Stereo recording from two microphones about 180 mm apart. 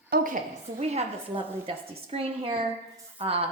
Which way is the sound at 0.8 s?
35° right (ahead or behind).